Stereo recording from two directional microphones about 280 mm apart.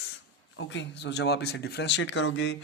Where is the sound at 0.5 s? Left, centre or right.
Left.